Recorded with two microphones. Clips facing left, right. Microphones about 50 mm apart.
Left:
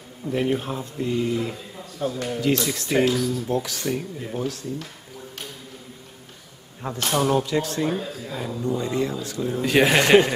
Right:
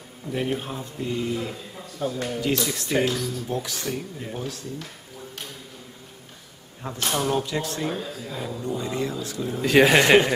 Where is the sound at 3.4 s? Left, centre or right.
Left.